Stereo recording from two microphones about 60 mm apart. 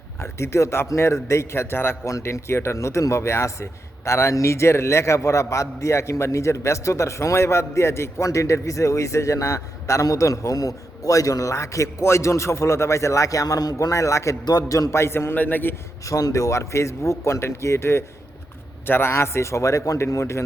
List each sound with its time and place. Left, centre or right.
0.2 s a man's voice: left
2.0 s speech: left
14.9 s a man's voice: left
15.4 s a man's voice: left
16.0 s a man's voice: left
20.1 s a man's voice: left